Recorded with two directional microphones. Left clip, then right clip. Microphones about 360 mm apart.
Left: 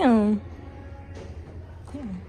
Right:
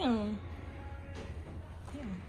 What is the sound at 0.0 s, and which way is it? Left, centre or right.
Music, left.